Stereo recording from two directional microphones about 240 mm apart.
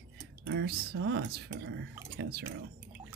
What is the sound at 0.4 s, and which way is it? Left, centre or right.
Speech, right.